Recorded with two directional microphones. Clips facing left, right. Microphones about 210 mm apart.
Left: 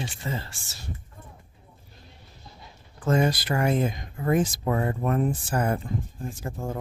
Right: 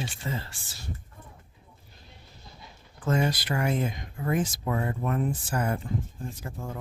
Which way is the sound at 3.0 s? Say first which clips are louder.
Left 3 dB; 45° left (ahead or behind).